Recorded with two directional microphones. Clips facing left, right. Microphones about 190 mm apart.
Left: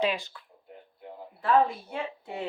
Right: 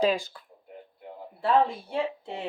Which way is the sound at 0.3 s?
35° right (ahead or behind).